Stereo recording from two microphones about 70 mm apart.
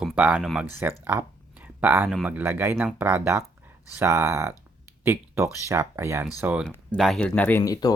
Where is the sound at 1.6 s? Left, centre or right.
Right.